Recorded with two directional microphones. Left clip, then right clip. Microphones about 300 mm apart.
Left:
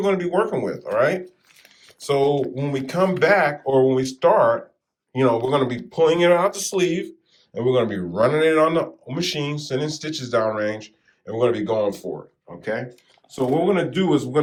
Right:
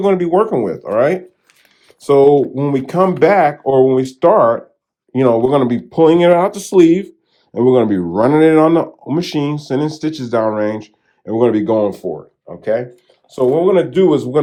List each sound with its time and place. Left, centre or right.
0.0 s speech: right
2.6 s speech: right